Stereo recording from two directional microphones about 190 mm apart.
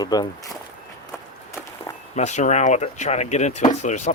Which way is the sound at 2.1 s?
40° left (ahead or behind).